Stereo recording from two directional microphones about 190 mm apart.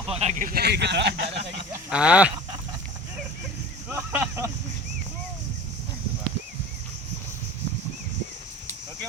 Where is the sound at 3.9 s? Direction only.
10° right (ahead or behind).